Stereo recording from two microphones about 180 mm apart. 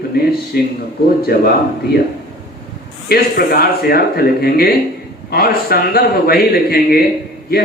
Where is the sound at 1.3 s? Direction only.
60° left (ahead or behind).